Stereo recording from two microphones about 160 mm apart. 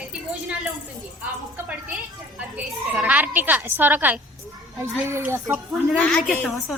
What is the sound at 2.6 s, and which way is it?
A woman's voice, 5° right (ahead or behind).